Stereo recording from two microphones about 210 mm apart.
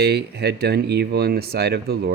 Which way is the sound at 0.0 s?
50° right (ahead or behind).